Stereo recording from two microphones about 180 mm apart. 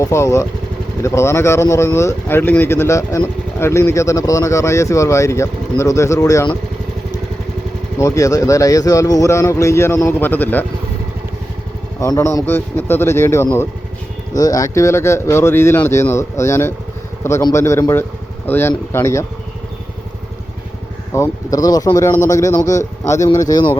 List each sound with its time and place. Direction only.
0.0 s speech: 15° left (ahead or behind)
7.9 s speech: 15° left (ahead or behind)
11.9 s speech: 15° left (ahead or behind)
21.1 s speech: 20° left (ahead or behind)